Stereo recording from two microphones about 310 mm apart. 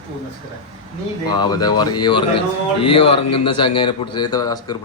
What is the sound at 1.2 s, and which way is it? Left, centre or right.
Speech, centre.